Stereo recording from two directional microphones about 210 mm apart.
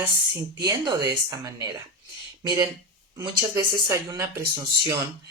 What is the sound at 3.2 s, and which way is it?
Speech, 15° right (ahead or behind).